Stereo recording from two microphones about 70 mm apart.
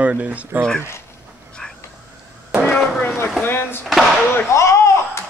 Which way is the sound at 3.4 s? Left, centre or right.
Left.